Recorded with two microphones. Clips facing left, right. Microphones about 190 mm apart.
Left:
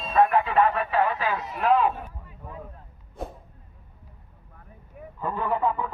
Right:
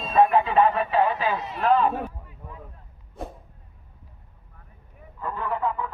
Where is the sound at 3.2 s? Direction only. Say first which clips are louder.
Left 1 dB; centre (ahead or behind).